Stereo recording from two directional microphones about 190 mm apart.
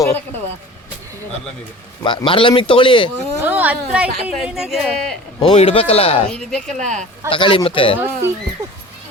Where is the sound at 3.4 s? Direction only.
10° right (ahead or behind).